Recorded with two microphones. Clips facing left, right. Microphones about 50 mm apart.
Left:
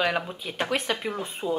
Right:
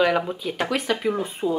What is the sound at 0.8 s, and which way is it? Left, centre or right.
Speech, right.